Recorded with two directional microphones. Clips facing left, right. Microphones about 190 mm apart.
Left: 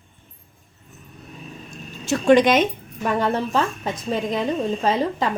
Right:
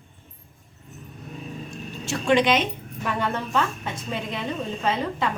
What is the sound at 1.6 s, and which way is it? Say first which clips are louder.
A woman's voice: left 10 dB; 40° left (ahead or behind).